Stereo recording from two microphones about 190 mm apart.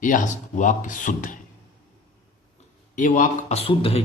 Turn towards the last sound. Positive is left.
turn(degrees=30)  # may be behind; listen again after turning